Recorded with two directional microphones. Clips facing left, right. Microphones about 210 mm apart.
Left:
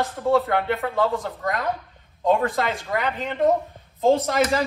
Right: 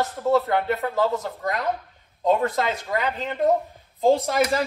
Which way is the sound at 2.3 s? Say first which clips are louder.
Even; centre (ahead or behind).